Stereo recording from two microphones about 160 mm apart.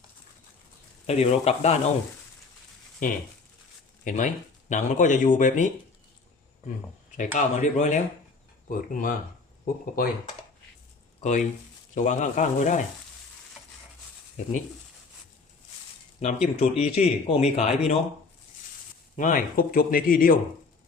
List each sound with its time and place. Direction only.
1.0 s speech: 40° left (ahead or behind)
3.0 s speech: 55° left (ahead or behind)
7.2 s speech: 50° left (ahead or behind)
11.2 s speech: 50° left (ahead or behind)
16.2 s speech: 45° left (ahead or behind)
19.1 s speech: 55° left (ahead or behind)